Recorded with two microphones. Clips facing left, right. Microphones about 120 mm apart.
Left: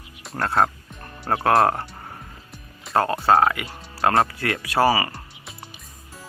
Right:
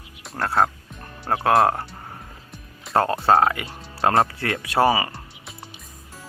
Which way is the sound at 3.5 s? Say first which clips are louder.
Even; 30° right (ahead or behind).